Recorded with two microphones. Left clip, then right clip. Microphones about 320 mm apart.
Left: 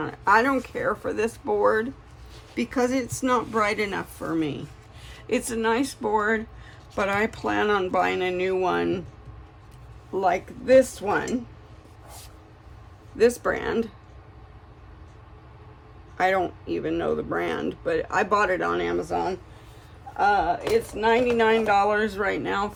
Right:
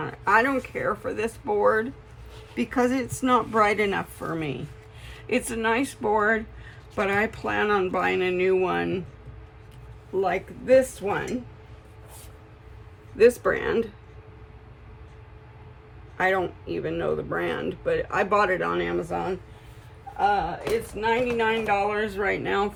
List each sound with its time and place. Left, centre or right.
0.0 s speech: centre
10.2 s speech: centre
13.1 s speech: centre
16.1 s speech: centre
21.0 s speech: centre